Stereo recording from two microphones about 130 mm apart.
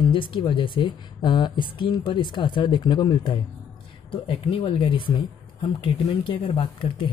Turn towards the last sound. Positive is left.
turn(degrees=40)  # may be behind; listen again after turning